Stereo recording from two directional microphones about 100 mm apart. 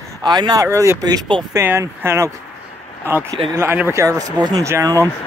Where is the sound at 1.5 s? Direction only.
25° right (ahead or behind).